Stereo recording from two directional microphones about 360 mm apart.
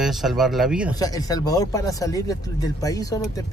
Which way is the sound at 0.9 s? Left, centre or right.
Centre.